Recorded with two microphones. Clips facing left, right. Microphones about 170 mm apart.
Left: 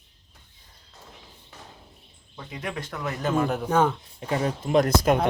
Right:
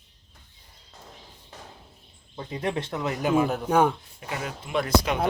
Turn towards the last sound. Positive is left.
turn(degrees=45)  # may be behind; listen again after turning